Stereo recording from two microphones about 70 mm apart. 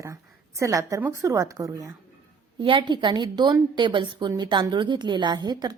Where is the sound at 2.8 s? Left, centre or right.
Right.